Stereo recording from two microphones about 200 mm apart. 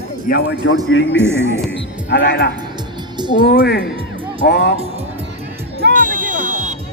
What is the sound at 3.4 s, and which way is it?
A man's voice, 55° left (ahead or behind).